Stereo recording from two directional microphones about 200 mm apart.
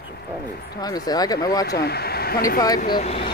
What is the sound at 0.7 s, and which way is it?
Speech, 20° left (ahead or behind).